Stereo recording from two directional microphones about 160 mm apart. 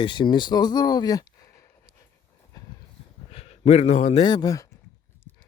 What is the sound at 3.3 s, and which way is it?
Speech, 40° left (ahead or behind).